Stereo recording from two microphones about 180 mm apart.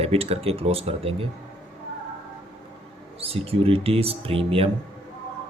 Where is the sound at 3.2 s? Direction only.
30° right (ahead or behind).